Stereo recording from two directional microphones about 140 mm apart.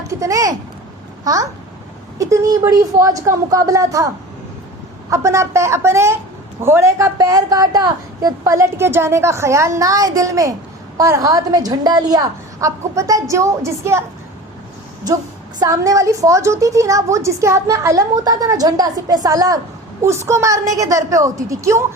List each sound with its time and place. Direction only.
0.1 s a woman's voice: 20° right (ahead or behind)
5.1 s a woman's voice: 20° right (ahead or behind)
15.5 s a woman's voice: 25° right (ahead or behind)